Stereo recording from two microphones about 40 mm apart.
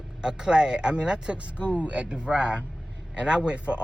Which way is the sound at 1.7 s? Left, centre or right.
Right.